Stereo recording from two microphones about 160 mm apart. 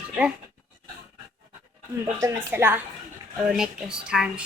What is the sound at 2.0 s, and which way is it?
A woman's voice, 15° right (ahead or behind).